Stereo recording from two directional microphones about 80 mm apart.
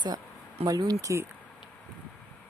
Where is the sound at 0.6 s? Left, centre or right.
Right.